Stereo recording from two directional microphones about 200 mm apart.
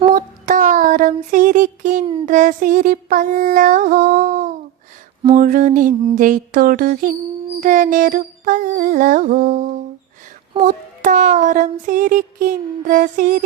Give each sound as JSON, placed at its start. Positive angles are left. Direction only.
{"t": 0.1, "sound": "child singing", "side_deg": -40}
{"t": 2.2, "sound": "music", "side_deg": -40}
{"t": 10.6, "sound": "a sound", "side_deg": -40}